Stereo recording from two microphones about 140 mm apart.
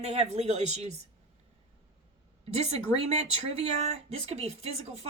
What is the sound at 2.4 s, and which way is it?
A woman's voice, 45° right (ahead or behind).